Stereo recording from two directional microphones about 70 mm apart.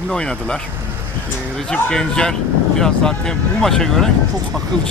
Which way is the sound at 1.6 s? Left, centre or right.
Centre.